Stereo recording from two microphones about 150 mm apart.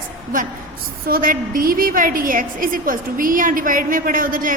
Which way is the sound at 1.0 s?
75° right (ahead or behind).